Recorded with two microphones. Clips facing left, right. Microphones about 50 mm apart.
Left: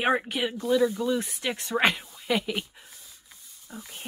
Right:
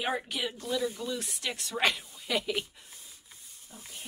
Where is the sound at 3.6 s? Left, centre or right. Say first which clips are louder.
Left 6 dB; left.